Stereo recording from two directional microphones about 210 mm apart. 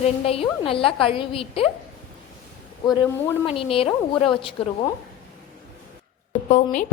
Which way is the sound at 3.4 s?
25° left (ahead or behind).